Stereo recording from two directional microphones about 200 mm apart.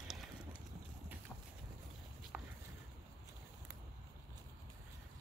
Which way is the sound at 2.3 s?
5° right (ahead or behind).